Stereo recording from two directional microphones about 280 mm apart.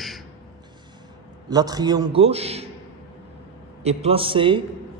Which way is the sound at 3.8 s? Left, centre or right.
Right.